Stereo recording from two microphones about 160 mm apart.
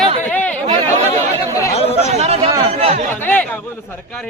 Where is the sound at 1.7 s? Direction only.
40° left (ahead or behind).